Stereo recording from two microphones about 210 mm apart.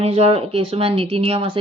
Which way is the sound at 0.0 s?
30° right (ahead or behind).